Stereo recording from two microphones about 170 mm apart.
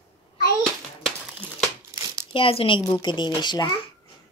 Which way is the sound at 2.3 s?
35° left (ahead or behind).